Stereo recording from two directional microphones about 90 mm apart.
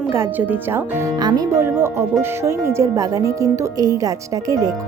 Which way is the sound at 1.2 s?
50° right (ahead or behind).